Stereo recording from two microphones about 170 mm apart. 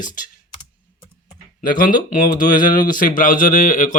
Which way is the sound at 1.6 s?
55° left (ahead or behind).